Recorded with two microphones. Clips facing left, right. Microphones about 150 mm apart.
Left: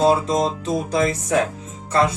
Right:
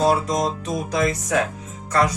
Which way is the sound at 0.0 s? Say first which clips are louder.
Left 2 dB; 30° left (ahead or behind).